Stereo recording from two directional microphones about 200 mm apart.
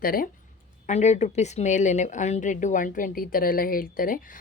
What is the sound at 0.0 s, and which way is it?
Speech, 45° left (ahead or behind).